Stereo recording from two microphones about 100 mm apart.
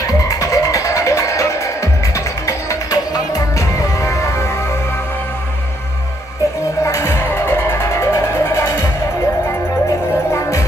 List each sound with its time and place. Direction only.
0.0 s music: 35° left (ahead or behind)
6.8 s music: 25° left (ahead or behind)